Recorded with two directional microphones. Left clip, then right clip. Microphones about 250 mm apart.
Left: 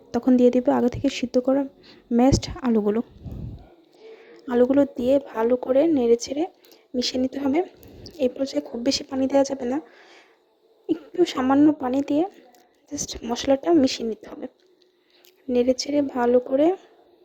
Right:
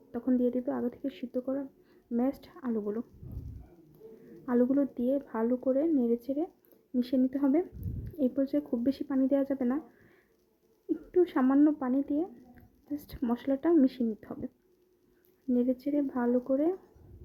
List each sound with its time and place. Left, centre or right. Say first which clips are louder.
0.1 s a woman's voice: left 12 dB; left
4.4 s a woman's voice: left 9 dB; left
10.8 s a woman's voice: left 5 dB; left
15.5 s a woman's voice: left 9 dB; left